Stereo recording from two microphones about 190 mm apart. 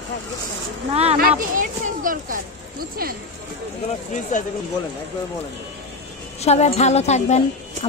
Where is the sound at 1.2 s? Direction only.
45° right (ahead or behind).